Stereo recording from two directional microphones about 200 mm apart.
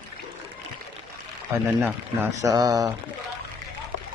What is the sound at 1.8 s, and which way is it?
Speech, 15° right (ahead or behind).